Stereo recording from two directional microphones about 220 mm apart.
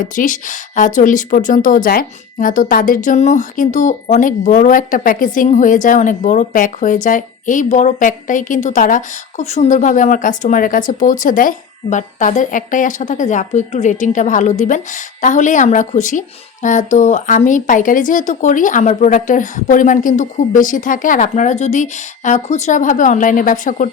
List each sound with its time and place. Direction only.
0.0 s speech: 35° left (ahead or behind)